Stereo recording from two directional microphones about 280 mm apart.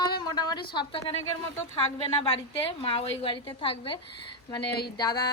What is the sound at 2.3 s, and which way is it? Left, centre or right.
A woman's voice, centre.